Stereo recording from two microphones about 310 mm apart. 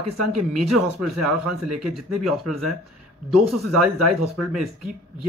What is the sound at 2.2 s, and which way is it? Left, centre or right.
Speech, centre.